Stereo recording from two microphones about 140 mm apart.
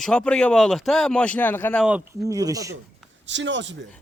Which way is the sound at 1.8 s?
10° right (ahead or behind).